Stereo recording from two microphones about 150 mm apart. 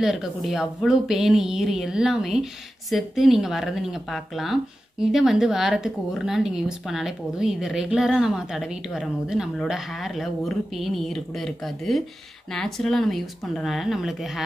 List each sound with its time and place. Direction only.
0.0 s speech: 5° right (ahead or behind)